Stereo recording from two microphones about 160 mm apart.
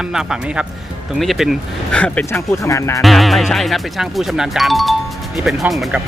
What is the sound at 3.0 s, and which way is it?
Speech, centre (ahead or behind).